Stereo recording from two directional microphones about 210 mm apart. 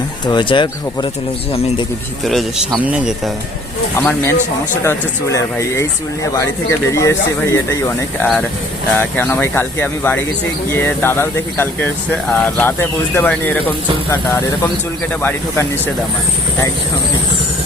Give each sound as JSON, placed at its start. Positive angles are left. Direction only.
{"t": 0.3, "sound": "speech", "side_deg": 20}
{"t": 2.2, "sound": "speech", "side_deg": 0}
{"t": 3.9, "sound": "speech", "side_deg": 10}